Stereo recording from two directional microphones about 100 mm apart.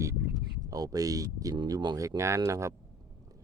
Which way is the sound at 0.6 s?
40° right (ahead or behind).